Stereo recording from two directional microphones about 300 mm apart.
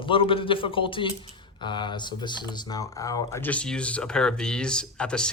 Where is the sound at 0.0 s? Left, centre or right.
Centre.